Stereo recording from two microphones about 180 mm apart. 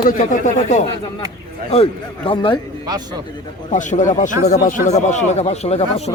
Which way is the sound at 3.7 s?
45° left (ahead or behind).